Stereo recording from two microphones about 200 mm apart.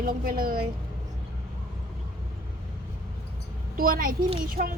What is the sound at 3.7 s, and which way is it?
Speech, 45° right (ahead or behind).